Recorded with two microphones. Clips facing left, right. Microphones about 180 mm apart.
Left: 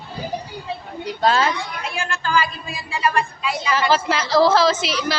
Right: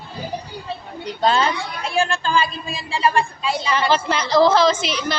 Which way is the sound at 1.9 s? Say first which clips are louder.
Right 3 dB; 30° right (ahead or behind).